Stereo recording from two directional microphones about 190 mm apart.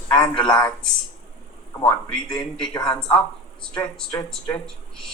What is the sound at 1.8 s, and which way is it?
A man's voice, 5° left (ahead or behind).